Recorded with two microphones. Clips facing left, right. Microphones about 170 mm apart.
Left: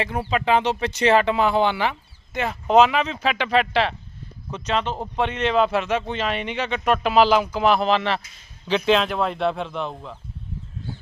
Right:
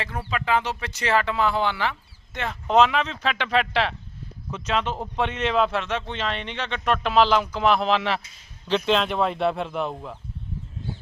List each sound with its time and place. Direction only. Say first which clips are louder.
0.0 s speech: left 6 dB; 15° left (ahead or behind); by 10.2 s 5° right (ahead or behind)